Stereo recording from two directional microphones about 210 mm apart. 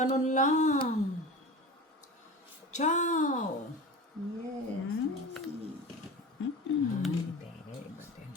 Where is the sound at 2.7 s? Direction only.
35° left (ahead or behind).